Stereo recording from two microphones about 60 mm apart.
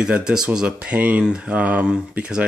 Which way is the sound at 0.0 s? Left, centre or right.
Centre.